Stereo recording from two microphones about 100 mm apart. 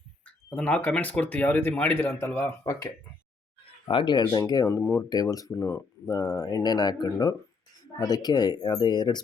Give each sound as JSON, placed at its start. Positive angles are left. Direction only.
{"t": 0.3, "sound": "speech", "side_deg": 10}
{"t": 3.8, "sound": "speech", "side_deg": 55}